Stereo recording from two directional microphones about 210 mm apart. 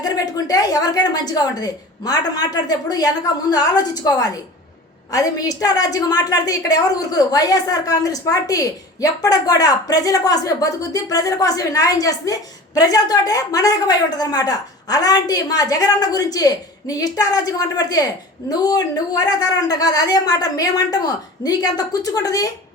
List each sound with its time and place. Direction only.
0.0 s a woman's voice: 15° left (ahead or behind)